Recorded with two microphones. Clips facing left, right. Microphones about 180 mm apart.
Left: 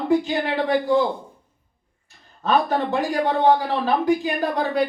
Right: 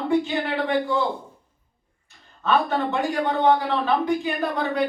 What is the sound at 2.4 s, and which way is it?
Speech, 35° left (ahead or behind).